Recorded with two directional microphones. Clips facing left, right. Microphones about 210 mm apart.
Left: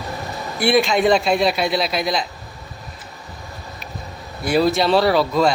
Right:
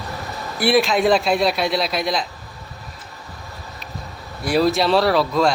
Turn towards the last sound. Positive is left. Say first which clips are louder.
# left 1 dB
turn(degrees=0)  # may be behind; listen again after turning